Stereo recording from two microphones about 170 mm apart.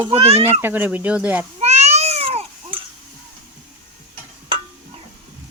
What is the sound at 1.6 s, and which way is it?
Cat, 40° right (ahead or behind).